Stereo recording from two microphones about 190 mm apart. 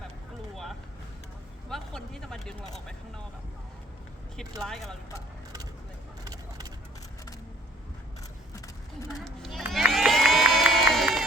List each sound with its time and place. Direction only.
0.5 s vehicle: centre (ahead or behind)
1.7 s speech: centre (ahead or behind)
4.6 s speech: centre (ahead or behind)
6.2 s vehicle: 20° right (ahead or behind)
9.2 s crowd: centre (ahead or behind)